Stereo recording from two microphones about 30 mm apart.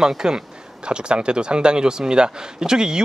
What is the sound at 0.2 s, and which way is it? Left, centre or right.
A man's voice, right.